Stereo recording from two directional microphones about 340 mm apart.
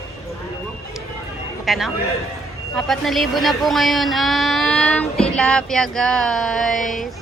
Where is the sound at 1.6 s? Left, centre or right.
Centre.